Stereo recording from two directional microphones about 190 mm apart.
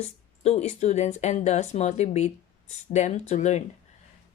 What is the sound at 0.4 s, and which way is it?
Speech, 35° left (ahead or behind).